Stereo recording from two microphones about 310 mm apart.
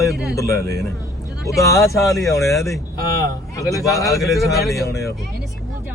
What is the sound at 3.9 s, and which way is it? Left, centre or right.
A man's voice, centre.